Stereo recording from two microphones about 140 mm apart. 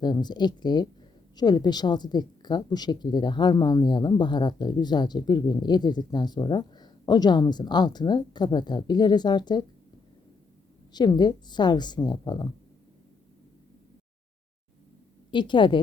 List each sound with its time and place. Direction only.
0.0 s a woman's voice: 30° left (ahead or behind)
10.9 s a woman's voice: 30° left (ahead or behind)
15.3 s a woman's voice: 35° left (ahead or behind)